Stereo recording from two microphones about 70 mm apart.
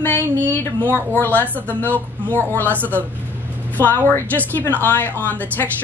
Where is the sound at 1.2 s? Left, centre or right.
Left.